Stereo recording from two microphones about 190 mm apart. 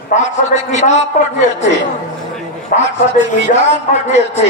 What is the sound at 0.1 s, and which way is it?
Speech, 35° left (ahead or behind).